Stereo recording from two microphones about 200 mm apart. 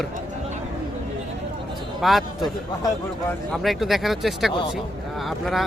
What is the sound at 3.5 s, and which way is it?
Speech, centre (ahead or behind).